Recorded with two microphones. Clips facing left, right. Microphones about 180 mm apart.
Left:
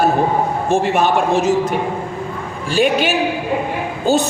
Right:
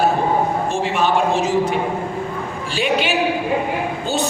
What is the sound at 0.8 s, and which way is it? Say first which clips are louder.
Speech: left 3 dB; 50° left (ahead or behind).